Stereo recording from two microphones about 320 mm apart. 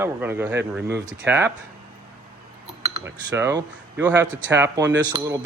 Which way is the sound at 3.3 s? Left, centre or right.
Centre.